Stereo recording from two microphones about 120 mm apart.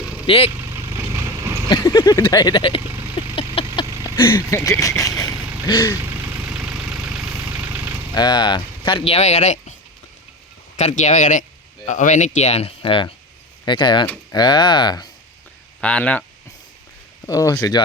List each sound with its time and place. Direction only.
0.3 s speech: 55° left (ahead or behind)
0.5 s vehicle: 20° right (ahead or behind)
1.8 s speech: 30° left (ahead or behind)
2.8 s a sound: 20° right (ahead or behind)
3.6 s vehicle: 50° left (ahead or behind)
4.0 s a sound: 20° left (ahead or behind)
4.5 s speech: 25° left (ahead or behind)
6.0 s vehicle: 15° right (ahead or behind)
8.1 s speech: 35° left (ahead or behind); by 9.7 s 75° left (ahead or behind)
10.8 s speech: 75° left (ahead or behind); by 15.1 s 35° left (ahead or behind)
15.8 s speech: 10° left (ahead or behind)
17.2 s speech: 30° left (ahead or behind)